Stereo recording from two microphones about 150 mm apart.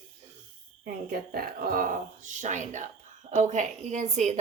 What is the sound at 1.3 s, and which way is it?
Speech, 80° right.